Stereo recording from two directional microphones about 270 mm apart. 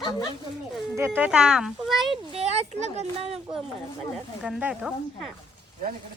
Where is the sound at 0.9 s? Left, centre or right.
Centre.